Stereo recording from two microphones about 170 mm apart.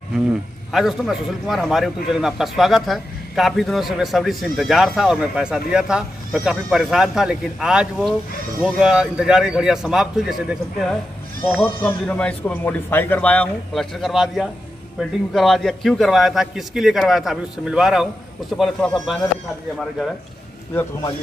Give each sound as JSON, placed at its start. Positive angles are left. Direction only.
{"t": 0.7, "sound": "a man's voice", "side_deg": 0}